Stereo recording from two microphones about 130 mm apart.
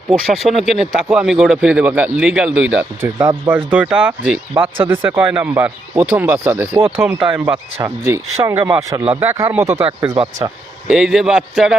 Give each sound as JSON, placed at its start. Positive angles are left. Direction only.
{"t": 0.1, "sound": "a man's voice", "side_deg": 0}
{"t": 4.6, "sound": "a man's voice", "side_deg": -20}